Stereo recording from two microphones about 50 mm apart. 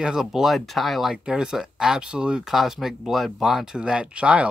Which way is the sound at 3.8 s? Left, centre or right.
Right.